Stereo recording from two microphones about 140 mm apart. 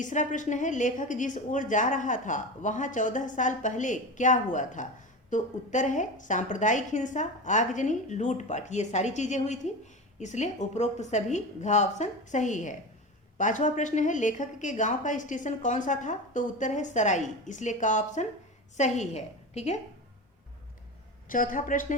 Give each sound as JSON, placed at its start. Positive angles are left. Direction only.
{"t": 0.0, "sound": "a woman's voice", "side_deg": 60}
{"t": 21.2, "sound": "a woman's voice", "side_deg": 75}